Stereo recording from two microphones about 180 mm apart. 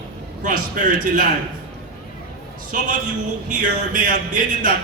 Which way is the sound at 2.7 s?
50° right (ahead or behind).